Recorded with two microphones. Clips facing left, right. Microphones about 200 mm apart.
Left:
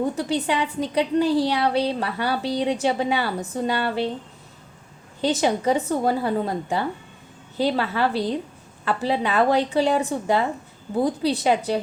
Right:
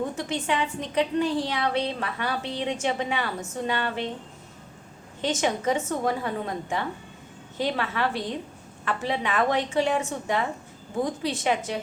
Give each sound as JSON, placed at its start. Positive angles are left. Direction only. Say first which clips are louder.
{"t": 0.2, "sound": "a woman's voice", "louder": "left 4 dB", "side_deg": 35}
{"t": 5.2, "sound": "a woman's voice", "louder": "left 4 dB", "side_deg": 35}